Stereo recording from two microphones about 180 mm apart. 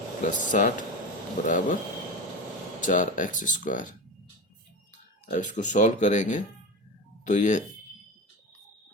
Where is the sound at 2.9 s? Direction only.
45° left (ahead or behind).